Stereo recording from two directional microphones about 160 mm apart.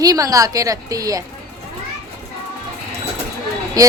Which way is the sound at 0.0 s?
20° right (ahead or behind).